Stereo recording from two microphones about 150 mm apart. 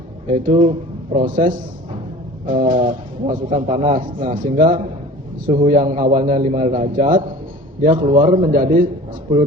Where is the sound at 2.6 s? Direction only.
65° right (ahead or behind).